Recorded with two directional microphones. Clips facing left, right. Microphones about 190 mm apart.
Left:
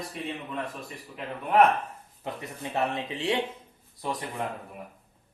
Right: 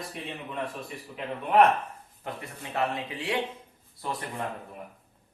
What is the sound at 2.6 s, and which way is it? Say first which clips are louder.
Speech: left 1 dB; 25° left (ahead or behind).